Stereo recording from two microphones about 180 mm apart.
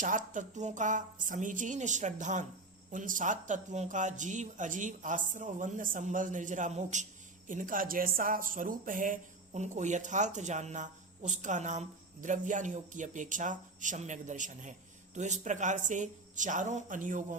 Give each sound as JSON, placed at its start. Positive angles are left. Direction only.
{"t": 0.0, "sound": "speech", "side_deg": -45}